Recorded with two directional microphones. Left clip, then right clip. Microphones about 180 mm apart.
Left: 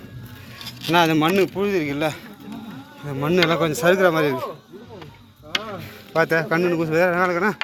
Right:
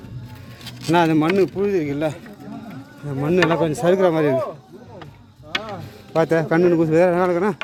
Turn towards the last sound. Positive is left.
turn(degrees=-25)  # may be behind; listen again after turning